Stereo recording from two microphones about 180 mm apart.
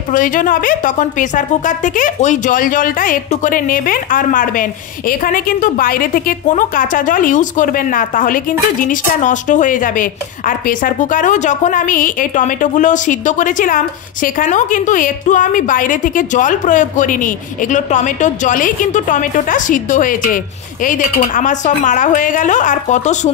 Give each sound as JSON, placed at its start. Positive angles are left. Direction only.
{"t": 0.1, "sound": "a woman's voice", "side_deg": 45}